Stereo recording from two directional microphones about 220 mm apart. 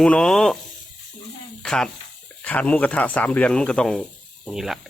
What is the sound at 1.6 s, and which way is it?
Speech, 5° left (ahead or behind).